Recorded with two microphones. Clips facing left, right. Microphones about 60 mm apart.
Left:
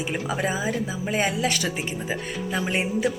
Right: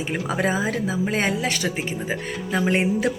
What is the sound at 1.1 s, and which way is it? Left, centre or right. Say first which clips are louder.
Speech: left 4 dB; right.